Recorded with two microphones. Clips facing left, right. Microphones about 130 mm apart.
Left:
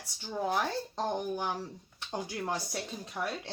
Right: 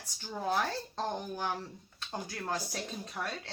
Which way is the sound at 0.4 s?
15° left (ahead or behind).